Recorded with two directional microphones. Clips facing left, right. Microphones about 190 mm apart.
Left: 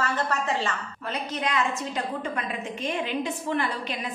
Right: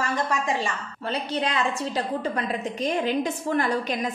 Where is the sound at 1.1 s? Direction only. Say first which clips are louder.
Right 3 dB; 30° right (ahead or behind).